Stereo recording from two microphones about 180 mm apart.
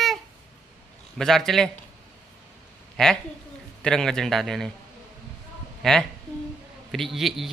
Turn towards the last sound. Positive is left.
turn(degrees=0)  # may be behind; listen again after turning